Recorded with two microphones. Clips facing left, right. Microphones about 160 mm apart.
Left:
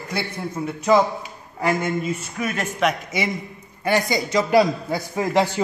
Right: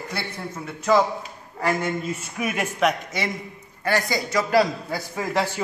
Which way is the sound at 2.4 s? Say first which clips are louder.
Right 1 dB; 10° right (ahead or behind).